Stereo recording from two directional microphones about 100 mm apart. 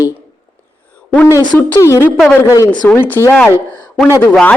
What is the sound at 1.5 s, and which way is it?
Speech, 25° left (ahead or behind).